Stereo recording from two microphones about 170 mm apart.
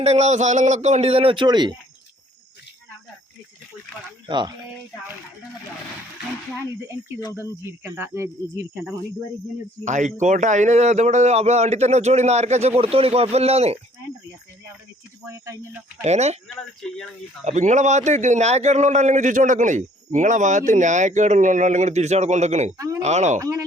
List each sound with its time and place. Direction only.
0.0 s speech: 40° right (ahead or behind)
4.3 s speech: 25° right (ahead or behind)
6.5 s speech: 15° right (ahead or behind)
9.8 s speech: 45° right (ahead or behind)
15.3 s speech: 15° right (ahead or behind)
16.0 s speech: 40° right (ahead or behind)
16.8 s speech: centre (ahead or behind)
17.4 s a man's voice: 45° right (ahead or behind)
22.8 s speech: 20° right (ahead or behind)
23.0 s speech: 40° right (ahead or behind)
23.4 s speech: 20° right (ahead or behind)